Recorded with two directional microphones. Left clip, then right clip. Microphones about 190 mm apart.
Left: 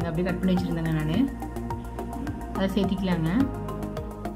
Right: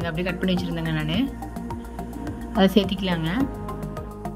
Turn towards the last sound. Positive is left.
turn(degrees=-35)  # may be behind; listen again after turning